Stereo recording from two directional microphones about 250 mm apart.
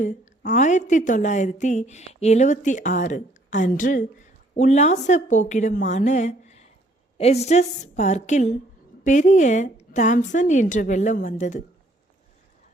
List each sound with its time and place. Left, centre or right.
0.0 s a woman's voice: left